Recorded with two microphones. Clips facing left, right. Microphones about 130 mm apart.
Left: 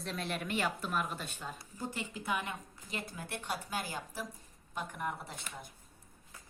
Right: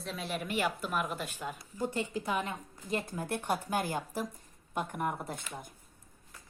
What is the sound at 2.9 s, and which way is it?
A woman's voice, 50° right (ahead or behind).